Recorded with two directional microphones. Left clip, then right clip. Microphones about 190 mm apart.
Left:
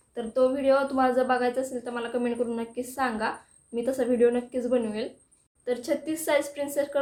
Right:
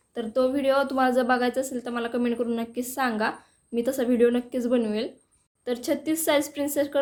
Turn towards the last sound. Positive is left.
turn(degrees=-55)  # may be behind; listen again after turning